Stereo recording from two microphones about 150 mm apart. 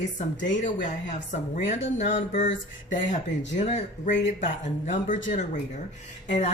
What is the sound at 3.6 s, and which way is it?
A woman's voice, 50° left (ahead or behind).